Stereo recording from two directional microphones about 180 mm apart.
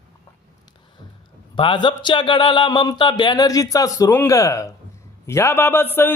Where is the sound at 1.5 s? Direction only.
25° left (ahead or behind).